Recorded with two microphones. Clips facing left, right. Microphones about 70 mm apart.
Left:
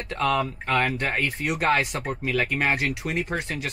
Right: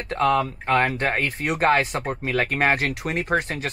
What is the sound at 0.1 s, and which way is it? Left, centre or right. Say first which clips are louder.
Speech: right 4 dB; right.